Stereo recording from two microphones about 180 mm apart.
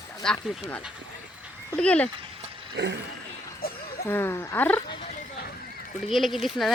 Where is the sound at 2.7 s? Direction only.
75° right (ahead or behind).